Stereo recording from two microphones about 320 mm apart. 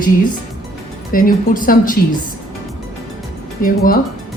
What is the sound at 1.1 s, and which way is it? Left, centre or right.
Speech, left.